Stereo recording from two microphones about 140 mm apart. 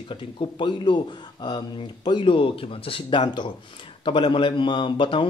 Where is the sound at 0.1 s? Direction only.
35° left (ahead or behind).